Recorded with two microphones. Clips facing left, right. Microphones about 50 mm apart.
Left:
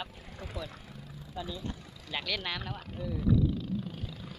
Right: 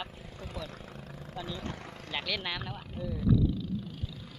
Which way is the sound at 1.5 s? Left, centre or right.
Right.